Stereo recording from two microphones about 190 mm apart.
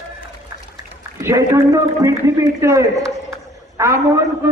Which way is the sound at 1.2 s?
15° right (ahead or behind).